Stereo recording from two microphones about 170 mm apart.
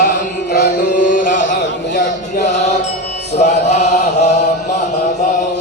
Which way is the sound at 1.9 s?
90° left.